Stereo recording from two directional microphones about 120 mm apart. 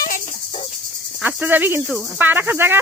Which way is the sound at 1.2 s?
15° right (ahead or behind).